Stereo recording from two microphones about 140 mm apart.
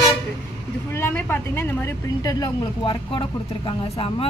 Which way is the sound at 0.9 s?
15° left (ahead or behind).